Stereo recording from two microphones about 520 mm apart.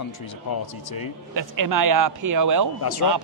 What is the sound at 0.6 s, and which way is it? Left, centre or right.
Speech, left.